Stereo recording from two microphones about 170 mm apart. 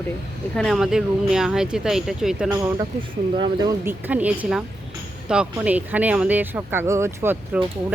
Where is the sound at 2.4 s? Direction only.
15° right (ahead or behind).